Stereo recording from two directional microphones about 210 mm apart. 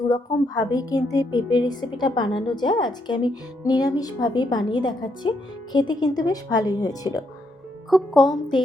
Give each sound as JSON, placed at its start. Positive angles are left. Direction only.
{"t": 0.1, "sound": "a woman's voice", "side_deg": 20}
{"t": 7.9, "sound": "speech", "side_deg": 0}
{"t": 8.3, "sound": "a woman's voice", "side_deg": 20}